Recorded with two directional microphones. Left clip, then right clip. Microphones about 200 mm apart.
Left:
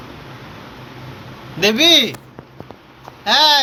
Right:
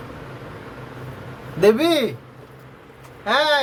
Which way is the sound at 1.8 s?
10° right (ahead or behind).